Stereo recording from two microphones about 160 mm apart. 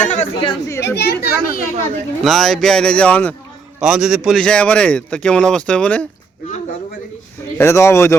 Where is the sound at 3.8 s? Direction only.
5° right (ahead or behind).